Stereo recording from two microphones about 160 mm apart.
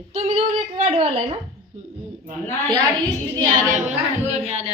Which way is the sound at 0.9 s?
35° right (ahead or behind).